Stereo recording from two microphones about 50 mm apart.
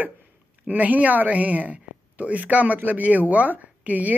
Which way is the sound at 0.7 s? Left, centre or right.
Right.